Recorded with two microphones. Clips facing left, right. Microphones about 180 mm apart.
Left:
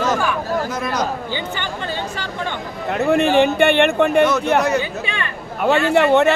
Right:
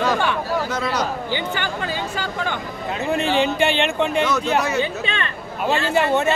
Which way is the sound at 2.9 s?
60° left (ahead or behind).